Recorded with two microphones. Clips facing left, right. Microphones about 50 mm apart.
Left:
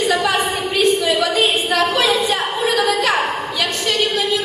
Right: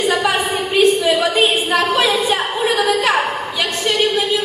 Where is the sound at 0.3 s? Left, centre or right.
Right.